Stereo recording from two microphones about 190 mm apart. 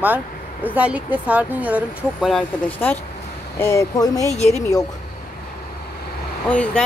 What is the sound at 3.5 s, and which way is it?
Speech, 15° left (ahead or behind).